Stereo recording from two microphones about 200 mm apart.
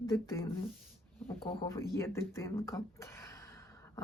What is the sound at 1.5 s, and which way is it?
Speech, 20° left (ahead or behind).